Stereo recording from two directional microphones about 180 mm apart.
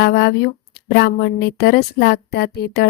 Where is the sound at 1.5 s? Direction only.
65° left (ahead or behind).